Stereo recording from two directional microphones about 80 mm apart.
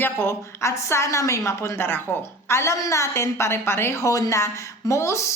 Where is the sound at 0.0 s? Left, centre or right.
Left.